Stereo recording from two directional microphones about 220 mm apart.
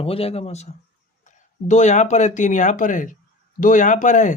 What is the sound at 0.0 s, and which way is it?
Speech, 25° left (ahead or behind).